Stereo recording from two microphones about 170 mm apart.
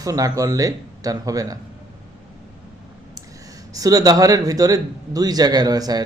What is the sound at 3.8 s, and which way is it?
A man's voice, 20° right (ahead or behind).